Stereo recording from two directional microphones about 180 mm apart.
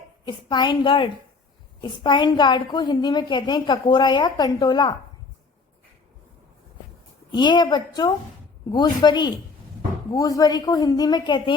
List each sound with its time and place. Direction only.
0.3 s a woman's voice: 25° left (ahead or behind)
7.3 s a woman's voice: 25° left (ahead or behind)